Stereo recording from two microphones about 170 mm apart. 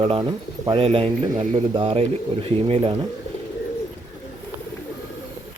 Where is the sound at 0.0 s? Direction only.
30° right (ahead or behind).